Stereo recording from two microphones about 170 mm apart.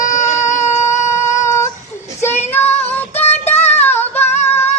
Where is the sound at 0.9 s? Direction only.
15° left (ahead or behind).